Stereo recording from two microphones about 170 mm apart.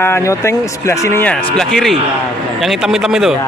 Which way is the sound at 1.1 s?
5° left (ahead or behind).